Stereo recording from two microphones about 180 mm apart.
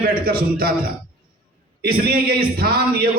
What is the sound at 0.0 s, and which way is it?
Speech, 55° right (ahead or behind).